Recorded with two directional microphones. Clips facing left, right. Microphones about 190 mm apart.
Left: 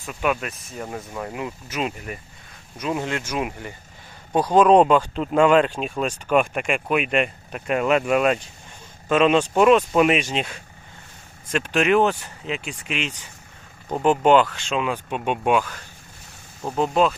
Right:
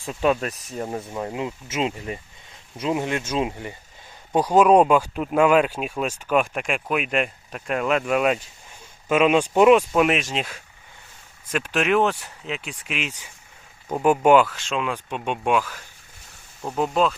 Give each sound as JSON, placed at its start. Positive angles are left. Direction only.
{"t": 0.0, "sound": "speech", "side_deg": -30}
{"t": 4.4, "sound": "speech", "side_deg": -10}
{"t": 9.9, "sound": "speech", "side_deg": 0}